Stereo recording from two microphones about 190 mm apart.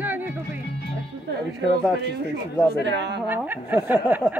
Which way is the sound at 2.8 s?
65° right (ahead or behind).